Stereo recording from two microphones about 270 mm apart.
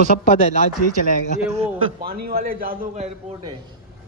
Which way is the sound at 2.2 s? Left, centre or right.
Right.